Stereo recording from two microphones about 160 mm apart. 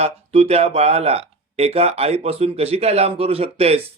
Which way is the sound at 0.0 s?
40° right (ahead or behind).